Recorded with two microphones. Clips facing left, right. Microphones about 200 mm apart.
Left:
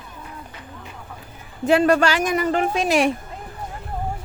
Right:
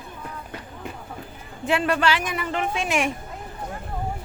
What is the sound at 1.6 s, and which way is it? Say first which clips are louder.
A woman's voice: left 6 dB; 40° left (ahead or behind).